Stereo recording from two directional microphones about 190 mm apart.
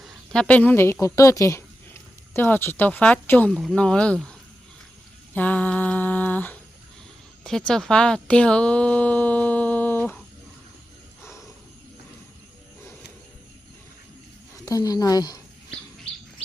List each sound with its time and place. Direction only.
0.0 s speech: centre (ahead or behind)
5.3 s humming: 10° left (ahead or behind)
7.4 s a sound: 5° left (ahead or behind)
11.2 s wild animals: 15° left (ahead or behind)
14.6 s speech: 20° left (ahead or behind)